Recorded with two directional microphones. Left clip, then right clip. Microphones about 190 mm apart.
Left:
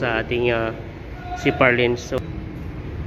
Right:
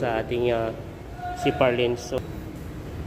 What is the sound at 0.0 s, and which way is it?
A man's voice, 5° right (ahead or behind).